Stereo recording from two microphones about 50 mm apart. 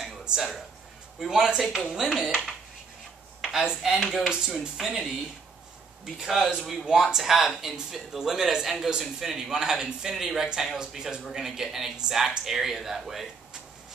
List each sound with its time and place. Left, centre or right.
0.2 s a sound: centre
1.2 s speech: centre
3.6 s speech: centre
6.9 s speech: centre